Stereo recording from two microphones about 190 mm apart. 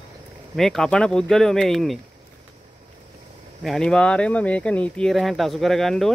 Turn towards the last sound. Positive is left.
turn(degrees=0)  # may be behind; listen again after turning